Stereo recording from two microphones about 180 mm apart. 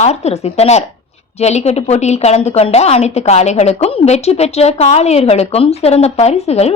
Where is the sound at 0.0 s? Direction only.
35° left (ahead or behind).